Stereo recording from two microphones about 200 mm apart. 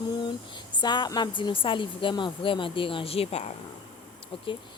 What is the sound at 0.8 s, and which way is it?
A woman's voice, 20° left (ahead or behind).